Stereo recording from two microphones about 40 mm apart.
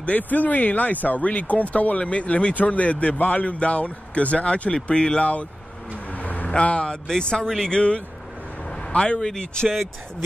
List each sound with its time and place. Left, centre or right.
0.0 s speech: left
6.1 s vehicle: left
6.5 s speech: left
7.1 s speech: centre
8.6 s vehicle: left
9.2 s speech: centre